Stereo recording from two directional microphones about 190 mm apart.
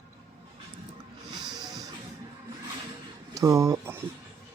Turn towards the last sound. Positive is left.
turn(degrees=-15)  # may be behind; listen again after turning